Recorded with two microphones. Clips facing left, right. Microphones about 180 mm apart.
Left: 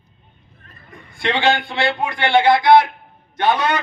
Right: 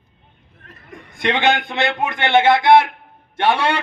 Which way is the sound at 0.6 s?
90° right.